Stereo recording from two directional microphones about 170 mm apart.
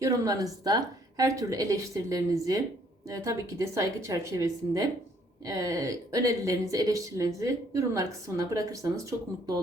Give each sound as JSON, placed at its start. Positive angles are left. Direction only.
{"t": 0.0, "sound": "a woman's voice", "side_deg": -20}